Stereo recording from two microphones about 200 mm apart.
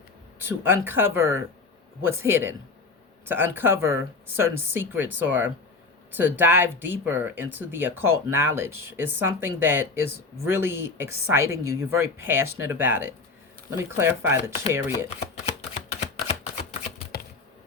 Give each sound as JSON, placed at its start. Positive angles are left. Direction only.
{"t": 0.4, "sound": "speech", "side_deg": -10}
{"t": 15.4, "sound": "typewriter", "side_deg": 30}
{"t": 17.1, "sound": "typewriter", "side_deg": 50}